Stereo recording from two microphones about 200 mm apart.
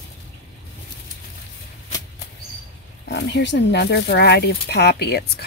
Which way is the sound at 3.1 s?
60° left (ahead or behind).